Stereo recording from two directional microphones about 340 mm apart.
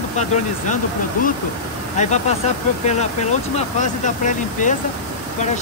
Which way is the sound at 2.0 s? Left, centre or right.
Centre.